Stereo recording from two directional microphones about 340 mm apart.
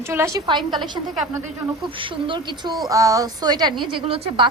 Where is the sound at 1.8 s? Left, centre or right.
Centre.